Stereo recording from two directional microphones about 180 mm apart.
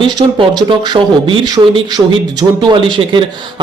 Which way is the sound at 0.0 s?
30° right (ahead or behind).